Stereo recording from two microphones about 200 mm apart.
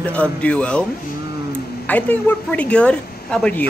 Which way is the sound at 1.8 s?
10° left (ahead or behind).